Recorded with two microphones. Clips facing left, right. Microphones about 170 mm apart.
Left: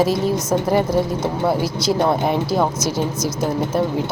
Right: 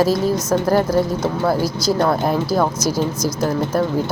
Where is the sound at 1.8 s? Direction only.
20° left (ahead or behind).